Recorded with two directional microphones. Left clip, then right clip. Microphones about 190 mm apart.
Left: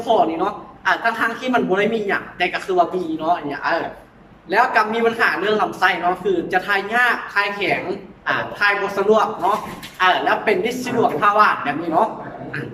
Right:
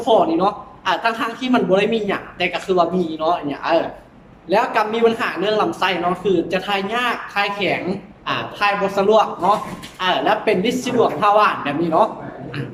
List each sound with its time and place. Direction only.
0.0 s a woman's voice: 20° right (ahead or behind)